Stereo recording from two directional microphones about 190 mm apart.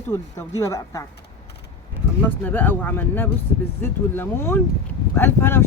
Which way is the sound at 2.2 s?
10° left (ahead or behind).